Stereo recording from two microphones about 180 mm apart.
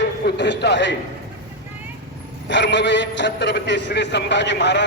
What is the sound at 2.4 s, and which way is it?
A man's voice, 80° left.